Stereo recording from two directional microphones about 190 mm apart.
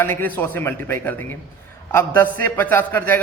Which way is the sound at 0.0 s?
10° left (ahead or behind).